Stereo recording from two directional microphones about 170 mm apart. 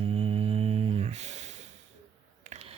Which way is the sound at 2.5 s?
35° right (ahead or behind).